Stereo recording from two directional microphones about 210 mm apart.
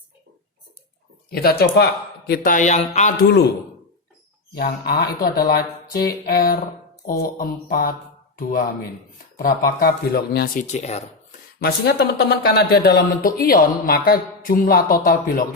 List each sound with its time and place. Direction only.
1.3 s speech: 50° left (ahead or behind)
4.5 s speech: 50° left (ahead or behind)
11.6 s speech: 50° left (ahead or behind)